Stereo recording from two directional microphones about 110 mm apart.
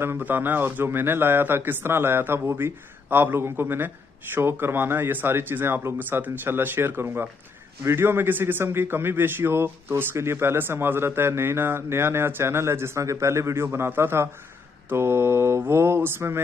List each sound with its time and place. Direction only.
0.0 s a man's voice: 20° right (ahead or behind)